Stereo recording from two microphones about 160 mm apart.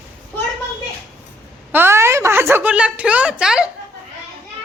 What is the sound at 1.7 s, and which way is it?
A woman's voice, 15° right (ahead or behind).